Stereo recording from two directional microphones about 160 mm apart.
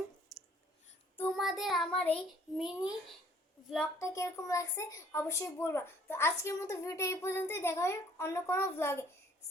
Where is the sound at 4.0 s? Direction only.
20° left (ahead or behind).